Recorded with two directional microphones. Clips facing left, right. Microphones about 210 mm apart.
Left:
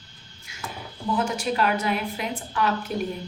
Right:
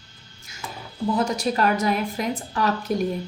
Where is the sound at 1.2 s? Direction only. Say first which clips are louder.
Right 2 dB; 40° right (ahead or behind).